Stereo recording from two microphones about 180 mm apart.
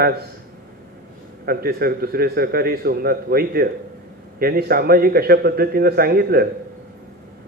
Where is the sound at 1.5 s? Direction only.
55° right (ahead or behind).